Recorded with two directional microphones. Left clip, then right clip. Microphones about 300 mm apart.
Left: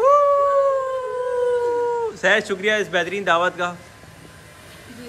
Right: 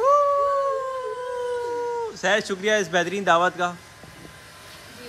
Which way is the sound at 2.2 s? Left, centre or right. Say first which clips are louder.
Left 3 dB; centre.